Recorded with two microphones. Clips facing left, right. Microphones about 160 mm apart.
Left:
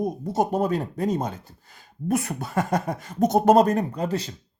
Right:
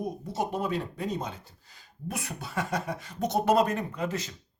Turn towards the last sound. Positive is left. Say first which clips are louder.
# left 5 dB
turn(degrees=35)  # may be behind; listen again after turning